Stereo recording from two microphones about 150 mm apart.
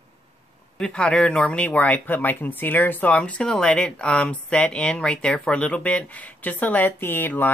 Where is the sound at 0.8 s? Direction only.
5° left (ahead or behind).